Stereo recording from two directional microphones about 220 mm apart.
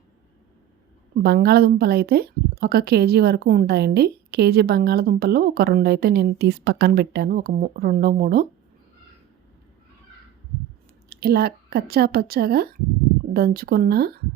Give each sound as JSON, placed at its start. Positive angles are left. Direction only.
{"t": 1.2, "sound": "a woman's voice", "side_deg": -45}
{"t": 11.1, "sound": "a woman's voice", "side_deg": -45}